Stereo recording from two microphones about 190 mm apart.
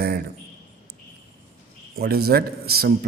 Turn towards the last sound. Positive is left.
turn(degrees=-55)  # may be behind; listen again after turning